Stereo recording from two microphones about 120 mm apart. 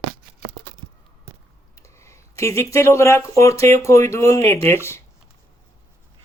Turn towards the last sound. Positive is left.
turn(degrees=20)  # may be behind; listen again after turning